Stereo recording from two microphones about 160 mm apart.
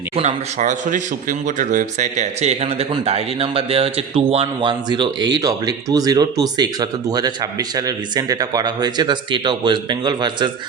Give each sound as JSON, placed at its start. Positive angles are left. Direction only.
{"t": 0.2, "sound": "speech", "side_deg": -45}